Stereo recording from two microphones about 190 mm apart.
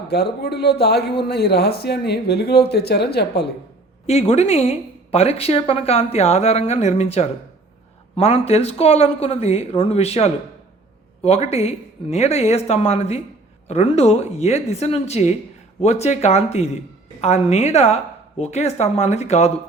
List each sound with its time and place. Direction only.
0.1 s speech: 60° left (ahead or behind)
4.0 s speech: 35° left (ahead or behind)